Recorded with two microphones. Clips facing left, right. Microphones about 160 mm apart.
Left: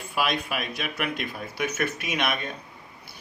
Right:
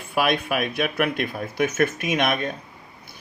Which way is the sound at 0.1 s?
55° right (ahead or behind).